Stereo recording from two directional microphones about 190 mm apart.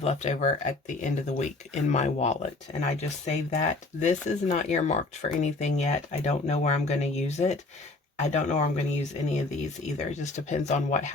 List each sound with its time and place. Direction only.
0.0 s speech: 35° left (ahead or behind)